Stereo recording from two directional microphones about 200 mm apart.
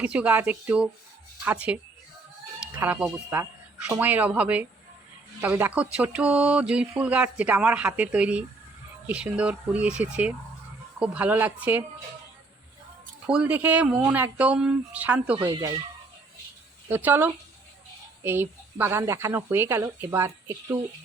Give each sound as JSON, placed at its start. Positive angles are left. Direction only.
{"t": 0.0, "sound": "speech", "side_deg": -5}
{"t": 2.8, "sound": "speech", "side_deg": -5}
{"t": 13.2, "sound": "speech", "side_deg": -5}
{"t": 15.4, "sound": "speech", "side_deg": -20}
{"t": 16.9, "sound": "speech", "side_deg": -10}